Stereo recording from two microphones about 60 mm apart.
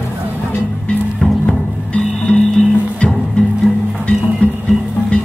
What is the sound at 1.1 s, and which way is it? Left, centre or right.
Music, centre.